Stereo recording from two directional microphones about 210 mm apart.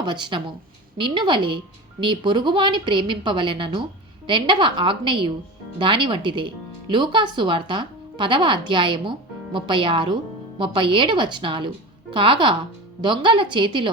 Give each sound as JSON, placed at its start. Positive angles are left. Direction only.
{"t": 0.0, "sound": "speech", "side_deg": -20}